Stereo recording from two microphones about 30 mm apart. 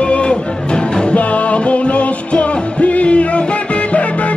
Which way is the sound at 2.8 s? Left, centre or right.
Left.